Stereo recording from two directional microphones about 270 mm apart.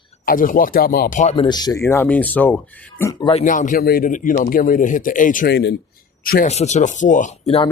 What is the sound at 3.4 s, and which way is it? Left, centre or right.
Speech, left.